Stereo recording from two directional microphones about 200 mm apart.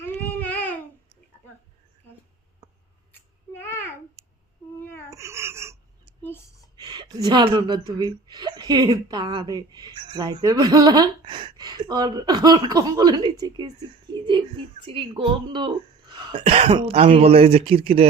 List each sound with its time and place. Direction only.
0.0 s babbling: 10° left (ahead or behind)
3.1 s a sound: 10° left (ahead or behind)
4.9 s babbling: 15° left (ahead or behind)
5.1 s babbling: 15° right (ahead or behind)
6.2 s a sound: 10° left (ahead or behind)
6.7 s a woman's voice: 20° right (ahead or behind)